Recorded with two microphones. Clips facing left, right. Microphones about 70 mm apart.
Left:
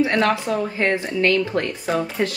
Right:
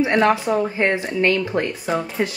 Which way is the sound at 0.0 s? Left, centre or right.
Right.